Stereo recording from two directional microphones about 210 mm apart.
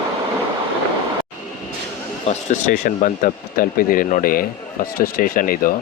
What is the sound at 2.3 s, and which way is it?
Speech, 35° left (ahead or behind).